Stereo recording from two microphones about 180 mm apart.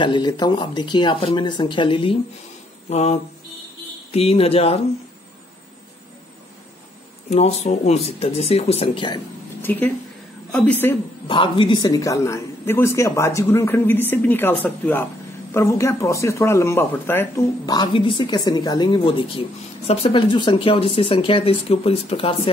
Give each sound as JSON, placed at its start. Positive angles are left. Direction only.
{"t": 0.0, "sound": "speech", "side_deg": 25}
{"t": 7.2, "sound": "speech", "side_deg": 35}
{"t": 9.6, "sound": "a woman's voice", "side_deg": 10}
{"t": 11.2, "sound": "a woman's voice", "side_deg": 30}
{"t": 17.7, "sound": "speech", "side_deg": 30}